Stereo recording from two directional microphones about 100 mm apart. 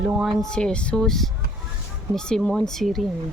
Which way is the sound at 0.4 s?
10° left (ahead or behind).